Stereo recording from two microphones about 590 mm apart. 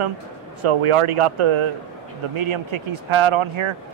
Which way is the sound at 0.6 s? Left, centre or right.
Right.